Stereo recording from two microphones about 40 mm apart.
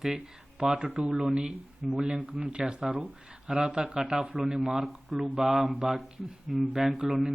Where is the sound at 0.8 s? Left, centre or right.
Right.